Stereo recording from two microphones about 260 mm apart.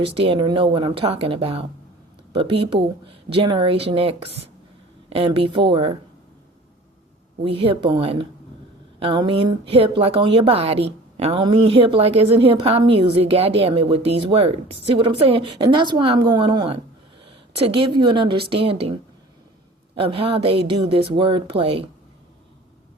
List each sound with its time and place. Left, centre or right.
0.0 s a woman's voice: right
7.4 s a woman's voice: right
20.0 s a woman's voice: right